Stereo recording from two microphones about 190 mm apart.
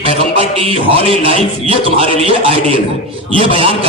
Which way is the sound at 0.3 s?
30° right (ahead or behind).